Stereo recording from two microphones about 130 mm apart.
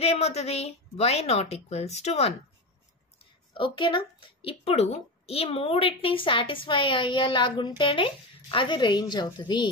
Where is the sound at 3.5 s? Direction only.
40° left (ahead or behind).